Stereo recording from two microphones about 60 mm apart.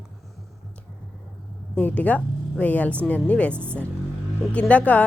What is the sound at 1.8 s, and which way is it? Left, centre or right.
Speech, left.